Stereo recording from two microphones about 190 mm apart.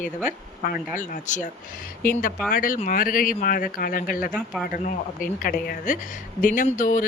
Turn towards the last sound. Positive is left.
turn(degrees=45)  # may be behind; listen again after turning